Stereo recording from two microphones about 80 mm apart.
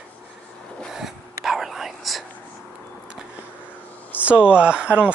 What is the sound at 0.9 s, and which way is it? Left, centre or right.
Whispering, centre.